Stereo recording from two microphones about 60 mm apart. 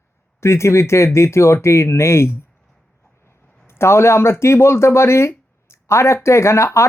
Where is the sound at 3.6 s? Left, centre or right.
Left.